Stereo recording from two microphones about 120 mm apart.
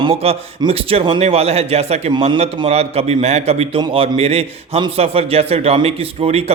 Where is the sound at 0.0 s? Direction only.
55° right (ahead or behind).